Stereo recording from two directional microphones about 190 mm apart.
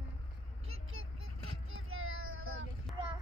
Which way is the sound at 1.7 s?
90° right.